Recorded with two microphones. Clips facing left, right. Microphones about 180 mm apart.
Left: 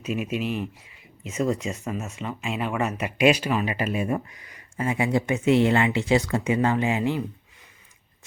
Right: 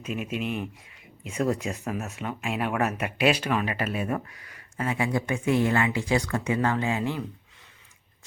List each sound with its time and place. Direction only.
0.1 s speech: 5° left (ahead or behind)
3.2 s speech: 10° left (ahead or behind)